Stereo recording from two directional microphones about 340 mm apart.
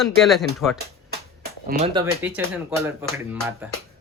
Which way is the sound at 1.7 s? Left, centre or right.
Centre.